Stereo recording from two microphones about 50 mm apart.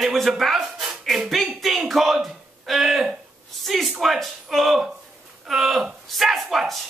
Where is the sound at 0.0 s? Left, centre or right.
Centre.